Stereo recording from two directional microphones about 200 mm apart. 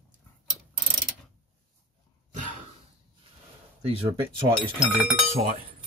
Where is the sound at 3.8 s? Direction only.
30° right (ahead or behind).